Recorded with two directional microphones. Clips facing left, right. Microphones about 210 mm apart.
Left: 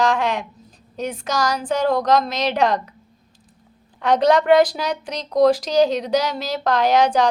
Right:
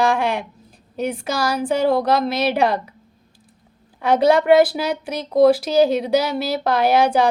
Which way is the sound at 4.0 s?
10° right (ahead or behind).